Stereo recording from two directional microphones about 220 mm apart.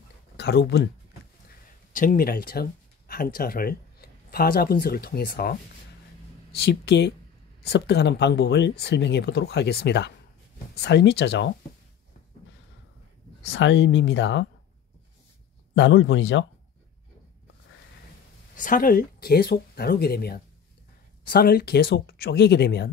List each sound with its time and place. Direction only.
0.4 s speech: 50° left (ahead or behind)
1.9 s speech: 40° left (ahead or behind); by 11.5 s 55° left (ahead or behind)
13.5 s speech: 55° left (ahead or behind)
15.7 s speech: 60° left (ahead or behind)
18.6 s speech: 40° left (ahead or behind)